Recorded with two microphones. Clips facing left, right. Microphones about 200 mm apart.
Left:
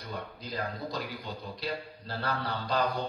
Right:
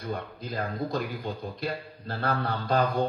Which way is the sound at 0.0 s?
50° right (ahead or behind).